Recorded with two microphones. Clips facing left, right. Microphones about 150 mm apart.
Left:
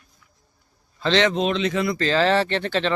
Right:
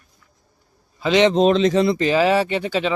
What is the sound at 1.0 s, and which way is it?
Speech, 10° right (ahead or behind).